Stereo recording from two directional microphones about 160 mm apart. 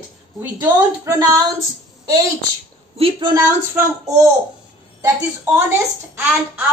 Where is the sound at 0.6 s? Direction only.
25° right (ahead or behind).